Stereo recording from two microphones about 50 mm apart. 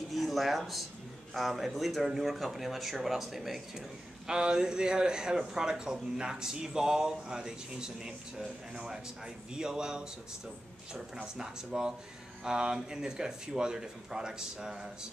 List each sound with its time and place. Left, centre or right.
0.1 s speech: centre
11.3 s speech: centre